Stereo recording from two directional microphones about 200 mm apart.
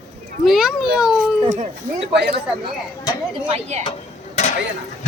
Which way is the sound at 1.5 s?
35° right (ahead or behind).